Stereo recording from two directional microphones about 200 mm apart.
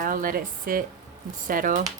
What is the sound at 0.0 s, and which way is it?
Speech, 45° right (ahead or behind).